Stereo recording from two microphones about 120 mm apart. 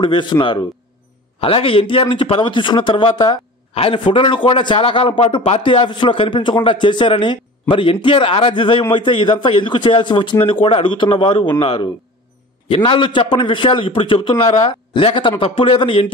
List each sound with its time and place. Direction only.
0.0 s speech: 40° left (ahead or behind)